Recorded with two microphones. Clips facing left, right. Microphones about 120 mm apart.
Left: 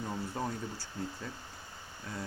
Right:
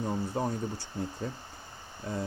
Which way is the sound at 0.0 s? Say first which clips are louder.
Right 5 dB; 20° right (ahead or behind).